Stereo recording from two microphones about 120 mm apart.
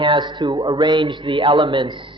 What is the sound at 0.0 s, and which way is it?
A man's voice, 40° right (ahead or behind).